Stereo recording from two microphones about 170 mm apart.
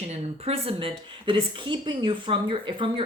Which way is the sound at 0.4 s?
35° right (ahead or behind).